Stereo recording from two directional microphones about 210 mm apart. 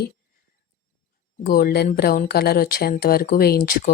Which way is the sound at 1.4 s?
45° left (ahead or behind).